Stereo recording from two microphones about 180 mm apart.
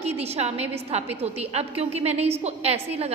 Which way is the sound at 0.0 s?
35° right (ahead or behind).